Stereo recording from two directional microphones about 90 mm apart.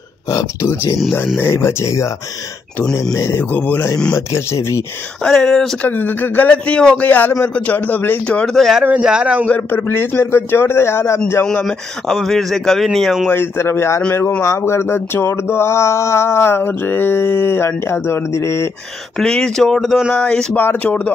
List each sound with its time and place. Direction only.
0.3 s speech: 40° left (ahead or behind)
1.4 s speech: 30° left (ahead or behind)
3.2 s speech: 25° left (ahead or behind)
4.3 s speech: 30° left (ahead or behind)
5.2 s speech: 10° left (ahead or behind)
5.9 s speech: 20° left (ahead or behind)
8.4 s speech: 5° left (ahead or behind)
9.0 s speech: 10° right (ahead or behind)
9.5 s speech: 20° left (ahead or behind)
11.4 s speech: 5° left (ahead or behind)
13.3 s speech: 25° left (ahead or behind)
19.1 s speech: 10° left (ahead or behind)
20.5 s speech: 20° left (ahead or behind)